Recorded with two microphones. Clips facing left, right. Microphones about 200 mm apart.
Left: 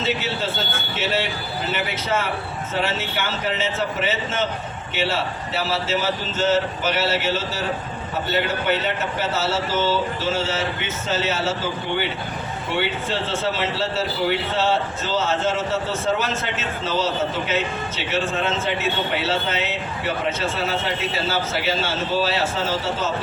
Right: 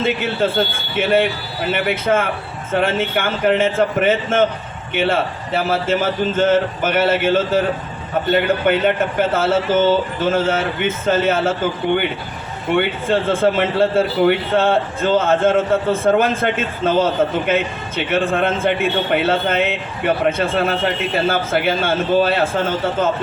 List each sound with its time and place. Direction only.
0.0 s a man's voice: 55° right (ahead or behind)